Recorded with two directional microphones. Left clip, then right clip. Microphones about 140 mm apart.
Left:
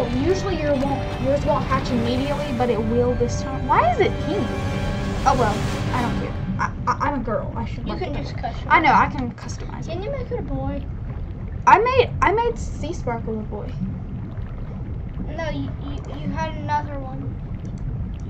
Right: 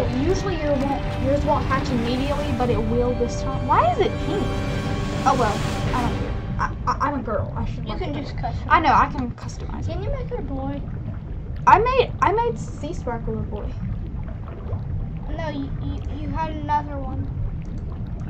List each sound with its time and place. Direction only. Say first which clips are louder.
0.0 s speech: left 1 dB; centre (ahead or behind); by 8.5 s 15° left (ahead or behind)
8.6 s a woman's voice: left 1 dB; 5° left (ahead or behind)
11.6 s a woman's voice: left 1 dB; 5° left (ahead or behind)
15.3 s a child's voice: left 1 dB; 20° left (ahead or behind)